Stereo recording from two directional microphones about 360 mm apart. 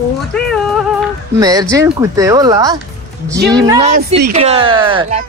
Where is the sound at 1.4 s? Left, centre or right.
Centre.